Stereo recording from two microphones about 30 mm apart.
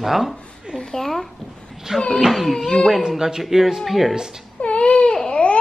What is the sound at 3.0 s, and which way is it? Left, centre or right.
Speech, right.